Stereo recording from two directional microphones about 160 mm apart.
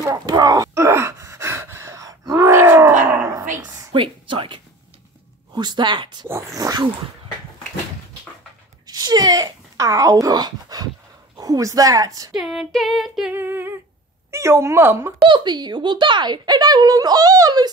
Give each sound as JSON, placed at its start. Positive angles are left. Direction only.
{"t": 0.0, "sound": "gasp", "side_deg": -20}
{"t": 3.1, "sound": "a sound", "side_deg": -15}
{"t": 3.9, "sound": "speech", "side_deg": -30}
{"t": 8.8, "sound": "speech", "side_deg": -25}
{"t": 12.3, "sound": "female singing", "side_deg": 0}
{"t": 13.3, "sound": "speech", "side_deg": -15}
{"t": 15.2, "sound": "speech", "side_deg": -30}